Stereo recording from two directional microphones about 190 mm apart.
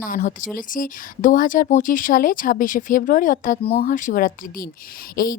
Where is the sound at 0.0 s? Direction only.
45° left (ahead or behind).